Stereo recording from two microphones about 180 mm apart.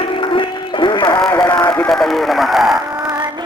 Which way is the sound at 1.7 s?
5° left (ahead or behind).